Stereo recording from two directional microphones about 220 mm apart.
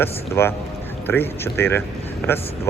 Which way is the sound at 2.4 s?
25° left (ahead or behind).